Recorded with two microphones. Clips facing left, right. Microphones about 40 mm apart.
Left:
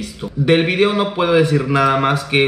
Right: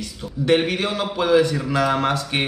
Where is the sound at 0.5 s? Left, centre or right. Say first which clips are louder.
Left 5 dB; left.